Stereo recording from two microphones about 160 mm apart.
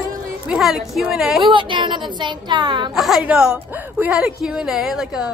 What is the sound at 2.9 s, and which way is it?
A woman's voice, centre (ahead or behind).